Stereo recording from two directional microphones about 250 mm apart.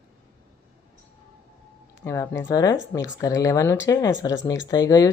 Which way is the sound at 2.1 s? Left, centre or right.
Centre.